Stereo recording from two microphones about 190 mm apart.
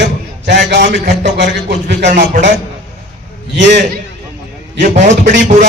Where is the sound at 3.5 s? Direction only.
65° right (ahead or behind).